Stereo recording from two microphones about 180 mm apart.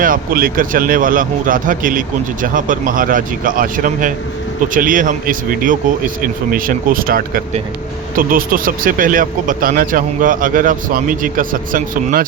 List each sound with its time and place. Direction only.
0.0 s speech: 50° right (ahead or behind)